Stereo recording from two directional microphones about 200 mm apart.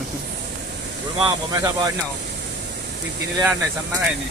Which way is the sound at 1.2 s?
20° right (ahead or behind).